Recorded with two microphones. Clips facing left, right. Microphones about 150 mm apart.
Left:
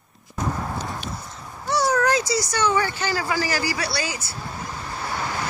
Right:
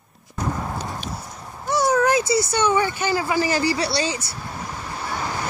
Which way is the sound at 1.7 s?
20° right (ahead or behind).